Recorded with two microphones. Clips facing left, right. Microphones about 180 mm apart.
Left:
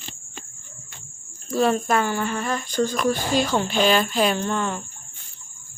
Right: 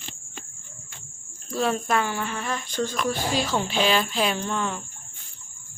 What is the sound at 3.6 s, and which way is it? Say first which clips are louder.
Music: left 3 dB; 45° left (ahead or behind).